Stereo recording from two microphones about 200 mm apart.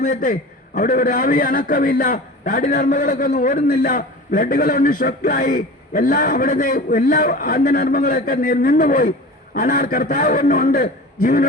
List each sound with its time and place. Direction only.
0.0 s a man's voice: 45° left (ahead or behind)